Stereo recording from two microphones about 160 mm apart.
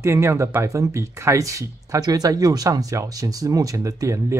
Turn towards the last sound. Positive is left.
turn(degrees=-20)  # may be behind; listen again after turning